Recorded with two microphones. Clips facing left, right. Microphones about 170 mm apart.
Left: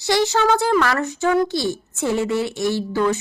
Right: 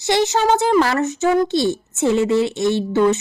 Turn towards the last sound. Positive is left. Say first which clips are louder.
# right 4 dB
turn(degrees=-25)  # may be behind; listen again after turning